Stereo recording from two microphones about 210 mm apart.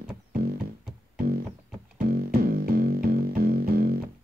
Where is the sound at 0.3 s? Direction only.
45° right (ahead or behind).